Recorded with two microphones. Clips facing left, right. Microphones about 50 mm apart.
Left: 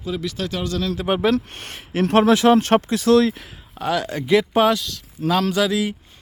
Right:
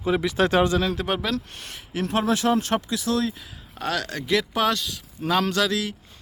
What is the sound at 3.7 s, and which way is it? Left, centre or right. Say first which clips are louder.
Speech: left 5 dB; centre.